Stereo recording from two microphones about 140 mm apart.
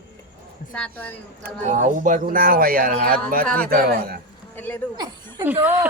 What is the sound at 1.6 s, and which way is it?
Speech, 60° right (ahead or behind).